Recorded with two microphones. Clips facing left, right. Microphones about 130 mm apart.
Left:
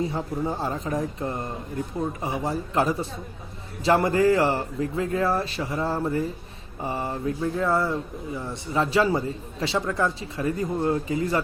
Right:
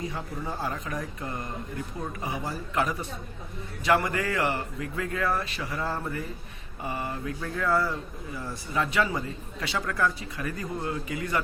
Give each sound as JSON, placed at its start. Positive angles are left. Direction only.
{"t": 0.0, "sound": "a man's voice", "side_deg": 30}